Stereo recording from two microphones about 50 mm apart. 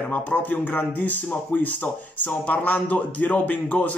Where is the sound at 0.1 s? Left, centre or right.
Left.